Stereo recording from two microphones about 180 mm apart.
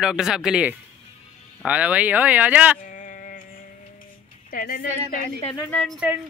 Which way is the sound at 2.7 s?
45° left (ahead or behind).